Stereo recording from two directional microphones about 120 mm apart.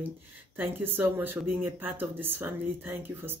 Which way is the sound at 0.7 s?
15° right (ahead or behind).